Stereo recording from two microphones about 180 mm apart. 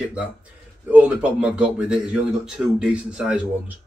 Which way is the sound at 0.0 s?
5° right (ahead or behind).